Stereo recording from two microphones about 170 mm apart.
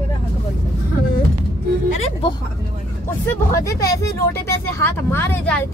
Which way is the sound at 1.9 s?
40° left (ahead or behind).